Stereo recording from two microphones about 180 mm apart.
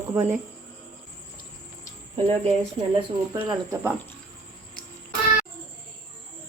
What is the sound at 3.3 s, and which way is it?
Speech, 25° right (ahead or behind).